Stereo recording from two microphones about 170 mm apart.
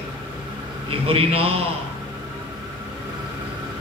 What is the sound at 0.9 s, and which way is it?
Speech, 35° right (ahead or behind).